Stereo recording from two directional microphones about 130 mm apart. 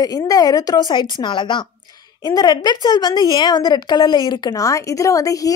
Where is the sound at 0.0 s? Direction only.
30° left (ahead or behind).